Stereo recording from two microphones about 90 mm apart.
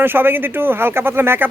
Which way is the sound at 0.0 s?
25° right (ahead or behind).